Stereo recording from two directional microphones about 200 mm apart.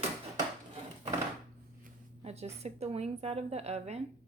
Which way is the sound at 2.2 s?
30° right (ahead or behind).